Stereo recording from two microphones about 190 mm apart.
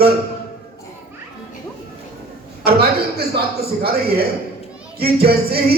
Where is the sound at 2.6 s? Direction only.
55° right (ahead or behind).